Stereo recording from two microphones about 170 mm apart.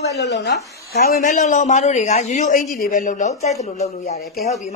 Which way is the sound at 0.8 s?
65° left (ahead or behind).